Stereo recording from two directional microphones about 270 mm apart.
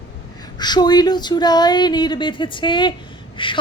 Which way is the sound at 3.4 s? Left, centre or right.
Centre.